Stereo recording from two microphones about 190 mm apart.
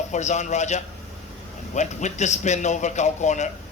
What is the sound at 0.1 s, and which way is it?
Speech, 40° left (ahead or behind).